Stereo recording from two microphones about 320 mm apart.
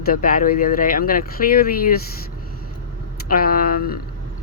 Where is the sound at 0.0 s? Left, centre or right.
Left.